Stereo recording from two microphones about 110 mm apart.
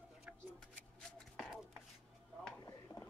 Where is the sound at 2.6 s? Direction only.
35° left (ahead or behind).